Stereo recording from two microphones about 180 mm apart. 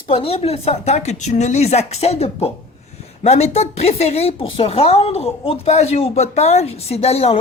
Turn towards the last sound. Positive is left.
turn(degrees=35)  # may be behind; listen again after turning